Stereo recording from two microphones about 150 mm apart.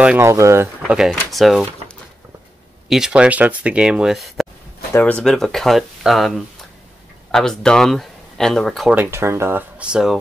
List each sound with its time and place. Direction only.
0.0 s speech: 15° right (ahead or behind)
0.9 s speech: centre (ahead or behind)
2.9 s speech: 5° right (ahead or behind)
4.9 s speech: 10° left (ahead or behind)
8.9 s speech: 15° right (ahead or behind)